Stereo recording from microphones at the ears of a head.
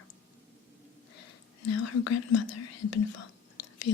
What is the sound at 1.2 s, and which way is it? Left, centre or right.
Whispering, left.